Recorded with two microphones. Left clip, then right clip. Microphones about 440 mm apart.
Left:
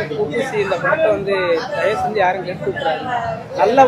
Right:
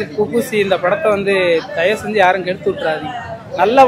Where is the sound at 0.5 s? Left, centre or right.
Right.